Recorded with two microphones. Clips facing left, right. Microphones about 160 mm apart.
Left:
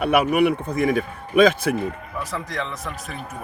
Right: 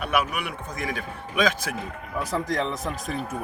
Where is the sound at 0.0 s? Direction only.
60° left (ahead or behind).